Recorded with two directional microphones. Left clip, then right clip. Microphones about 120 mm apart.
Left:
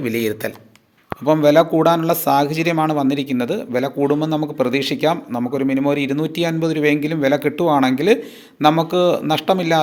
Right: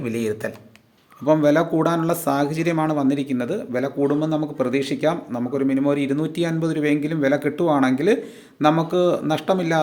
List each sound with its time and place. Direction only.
0.0 s speech: 15° left (ahead or behind)